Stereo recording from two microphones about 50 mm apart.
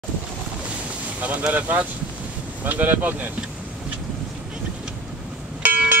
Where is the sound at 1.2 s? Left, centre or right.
Right.